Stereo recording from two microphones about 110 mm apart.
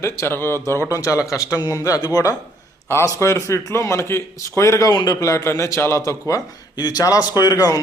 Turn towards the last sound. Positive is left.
turn(degrees=35)  # may be behind; listen again after turning